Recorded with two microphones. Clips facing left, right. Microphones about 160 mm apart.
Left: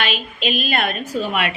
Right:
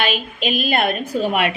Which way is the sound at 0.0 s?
45° right (ahead or behind).